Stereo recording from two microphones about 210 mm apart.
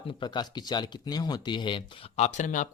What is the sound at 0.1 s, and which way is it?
Speech, 20° left (ahead or behind).